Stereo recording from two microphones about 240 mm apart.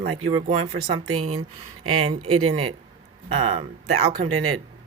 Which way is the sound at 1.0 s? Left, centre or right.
Right.